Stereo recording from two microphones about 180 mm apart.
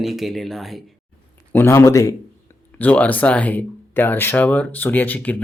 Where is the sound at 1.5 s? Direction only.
15° left (ahead or behind).